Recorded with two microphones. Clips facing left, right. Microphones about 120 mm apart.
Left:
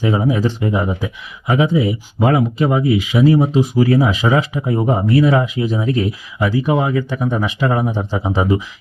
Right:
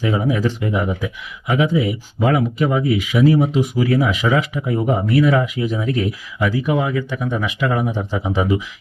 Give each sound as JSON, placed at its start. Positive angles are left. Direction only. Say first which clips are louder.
{"t": 0.0, "sound": "speech", "louder": "left 2 dB", "side_deg": 30}